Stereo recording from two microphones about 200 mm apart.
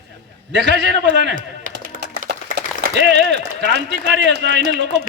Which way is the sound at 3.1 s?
60° right (ahead or behind).